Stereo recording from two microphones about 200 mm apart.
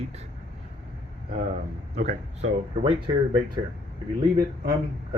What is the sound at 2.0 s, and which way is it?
Speech, 35° right (ahead or behind).